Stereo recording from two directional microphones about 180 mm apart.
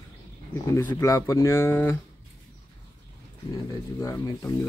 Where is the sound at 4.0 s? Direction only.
15° left (ahead or behind).